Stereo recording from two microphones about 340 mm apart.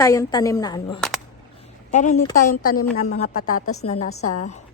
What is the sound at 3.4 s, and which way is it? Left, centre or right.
A woman's voice, left.